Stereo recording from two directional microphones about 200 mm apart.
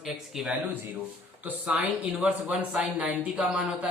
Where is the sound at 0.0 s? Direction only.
Centre (ahead or behind).